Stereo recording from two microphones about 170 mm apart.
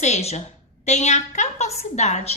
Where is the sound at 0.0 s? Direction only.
40° left (ahead or behind).